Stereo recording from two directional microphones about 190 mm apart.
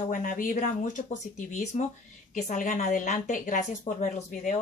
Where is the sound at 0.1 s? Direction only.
45° left (ahead or behind).